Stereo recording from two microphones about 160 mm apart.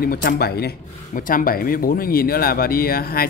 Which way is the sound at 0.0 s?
70° left (ahead or behind).